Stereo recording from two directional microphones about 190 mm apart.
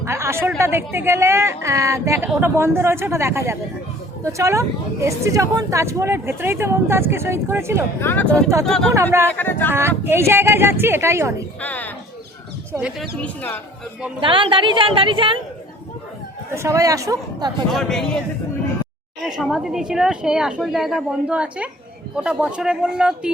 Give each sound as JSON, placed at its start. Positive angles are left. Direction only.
{"t": 0.0, "sound": "a woman's voice", "side_deg": -15}
{"t": 8.0, "sound": "a woman's voice", "side_deg": 10}
{"t": 10.0, "sound": "a woman's voice", "side_deg": -10}
{"t": 11.6, "sound": "speech", "side_deg": 10}
{"t": 12.7, "sound": "a woman's voice", "side_deg": -5}
{"t": 13.2, "sound": "speech", "side_deg": 10}
{"t": 14.2, "sound": "a woman's voice", "side_deg": -25}
{"t": 16.6, "sound": "a woman's voice", "side_deg": -15}
{"t": 17.7, "sound": "a woman's voice", "side_deg": 0}
{"t": 19.4, "sound": "a woman's voice", "side_deg": 0}